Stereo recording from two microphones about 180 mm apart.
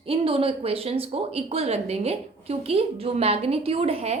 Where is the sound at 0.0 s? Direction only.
30° right (ahead or behind).